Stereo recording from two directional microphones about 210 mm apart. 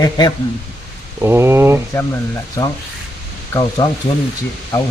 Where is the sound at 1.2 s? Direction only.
10° right (ahead or behind).